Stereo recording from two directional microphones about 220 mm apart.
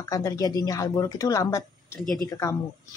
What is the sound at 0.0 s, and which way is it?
A woman's voice, 15° left (ahead or behind).